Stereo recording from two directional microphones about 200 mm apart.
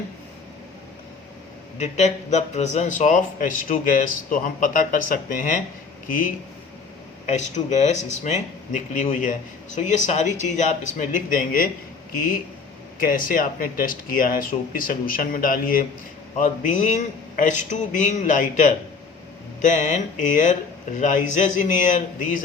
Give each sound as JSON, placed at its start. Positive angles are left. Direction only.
{"t": 1.8, "sound": "speech", "side_deg": 35}
{"t": 7.3, "sound": "speech", "side_deg": 35}
{"t": 13.0, "sound": "speech", "side_deg": 45}